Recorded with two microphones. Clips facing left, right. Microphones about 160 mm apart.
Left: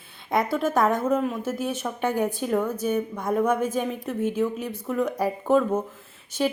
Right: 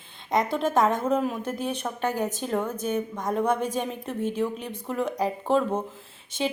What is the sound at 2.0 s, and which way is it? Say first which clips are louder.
Speech: left 3 dB; 10° right (ahead or behind).